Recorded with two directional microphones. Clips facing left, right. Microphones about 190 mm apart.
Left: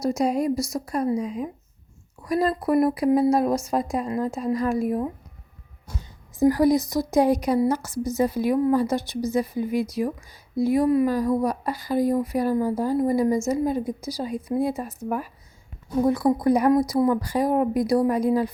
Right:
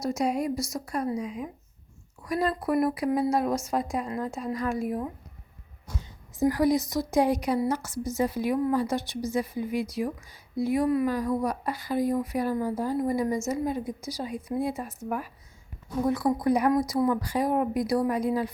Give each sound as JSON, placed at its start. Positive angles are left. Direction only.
{"t": 0.0, "sound": "a woman's voice", "side_deg": 35}
{"t": 6.4, "sound": "a woman's voice", "side_deg": 35}